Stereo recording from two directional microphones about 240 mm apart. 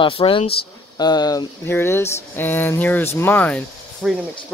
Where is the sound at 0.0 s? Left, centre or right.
Left.